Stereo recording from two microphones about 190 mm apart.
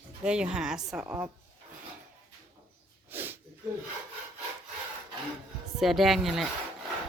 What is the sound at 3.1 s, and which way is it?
Sneeze, 10° right (ahead or behind).